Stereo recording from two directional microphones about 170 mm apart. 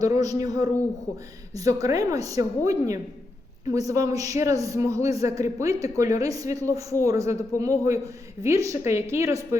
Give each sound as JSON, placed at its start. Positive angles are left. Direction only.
{"t": 0.0, "sound": "a woman's voice", "side_deg": -20}